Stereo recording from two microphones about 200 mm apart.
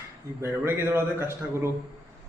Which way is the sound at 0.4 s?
10° right (ahead or behind).